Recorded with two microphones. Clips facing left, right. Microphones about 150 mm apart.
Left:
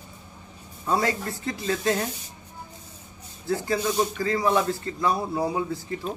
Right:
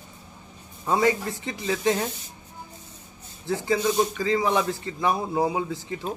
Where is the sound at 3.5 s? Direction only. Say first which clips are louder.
Right 1 dB; 15° right (ahead or behind).